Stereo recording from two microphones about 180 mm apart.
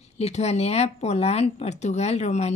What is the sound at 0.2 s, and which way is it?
Speech, 35° left (ahead or behind).